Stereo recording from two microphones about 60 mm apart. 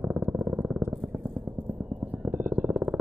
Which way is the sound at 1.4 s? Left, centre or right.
Right.